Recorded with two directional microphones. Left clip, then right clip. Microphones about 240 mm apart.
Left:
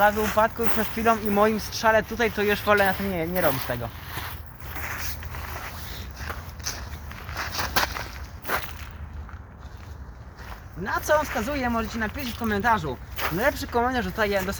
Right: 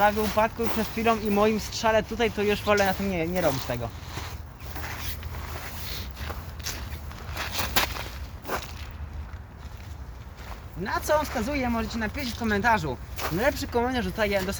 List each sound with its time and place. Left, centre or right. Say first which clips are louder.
0.0 s speech: left 2 dB; centre
2.8 s speech: left 2 dB; centre
4.8 s a sound: left 3 dB; centre
6.7 s walk: left 2 dB; centre
8.4 s walk: left 4 dB; centre
10.8 s speech: left 2 dB; centre
12.0 s speech: even; centre
13.1 s speech: left 2 dB; centre